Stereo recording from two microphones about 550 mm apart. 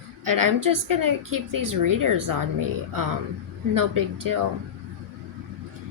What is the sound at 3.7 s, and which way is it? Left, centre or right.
Speech, right.